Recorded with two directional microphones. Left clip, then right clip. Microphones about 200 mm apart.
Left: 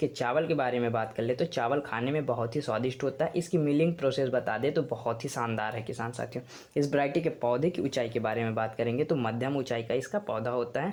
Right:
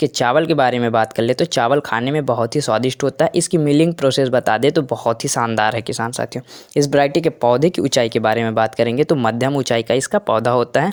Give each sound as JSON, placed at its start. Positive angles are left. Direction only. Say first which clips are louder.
{"t": 0.0, "sound": "speech", "louder": "right 13 dB", "side_deg": -45}